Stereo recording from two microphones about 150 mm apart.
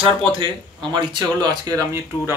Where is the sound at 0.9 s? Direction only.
30° right (ahead or behind).